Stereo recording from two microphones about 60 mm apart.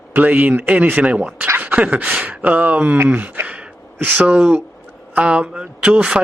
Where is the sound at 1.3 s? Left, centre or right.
Right.